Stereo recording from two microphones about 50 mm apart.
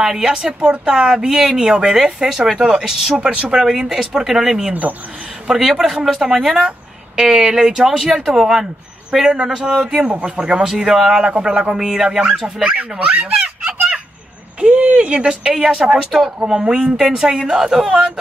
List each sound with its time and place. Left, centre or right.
0.0 s speech: centre
3.2 s speech: right
3.5 s speech: centre
13.0 s a sound: right
14.6 s speech: right